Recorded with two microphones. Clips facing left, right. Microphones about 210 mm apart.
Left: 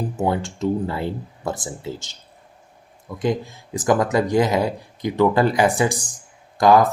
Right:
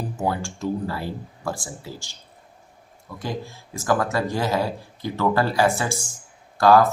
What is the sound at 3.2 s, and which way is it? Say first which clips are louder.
Speech: left 8 dB; 20° left (ahead or behind).